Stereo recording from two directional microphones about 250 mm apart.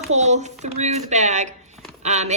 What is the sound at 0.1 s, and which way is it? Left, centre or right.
Speech, right.